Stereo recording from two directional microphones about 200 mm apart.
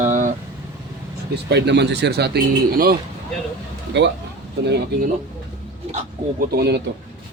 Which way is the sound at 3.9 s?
60° right (ahead or behind).